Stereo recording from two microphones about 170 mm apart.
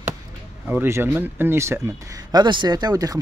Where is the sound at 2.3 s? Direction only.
25° right (ahead or behind).